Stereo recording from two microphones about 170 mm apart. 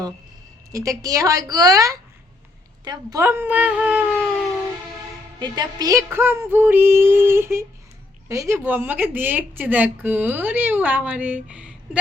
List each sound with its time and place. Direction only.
0.7 s a woman's voice: 20° right (ahead or behind)
5.4 s a woman's voice: 25° right (ahead or behind); by 11.7 s 5° right (ahead or behind)